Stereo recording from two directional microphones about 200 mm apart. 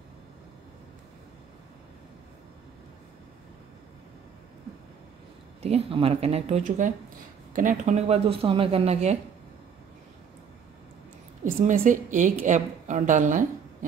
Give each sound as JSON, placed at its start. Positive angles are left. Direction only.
{"t": 5.6, "sound": "speech", "side_deg": -30}
{"t": 11.6, "sound": "speech", "side_deg": -40}